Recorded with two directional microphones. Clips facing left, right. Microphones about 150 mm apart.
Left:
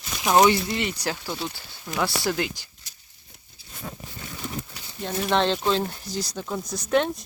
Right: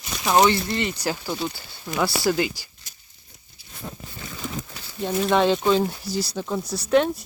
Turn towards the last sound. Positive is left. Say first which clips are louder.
# right 3 dB
turn(degrees=0)  # may be behind; listen again after turning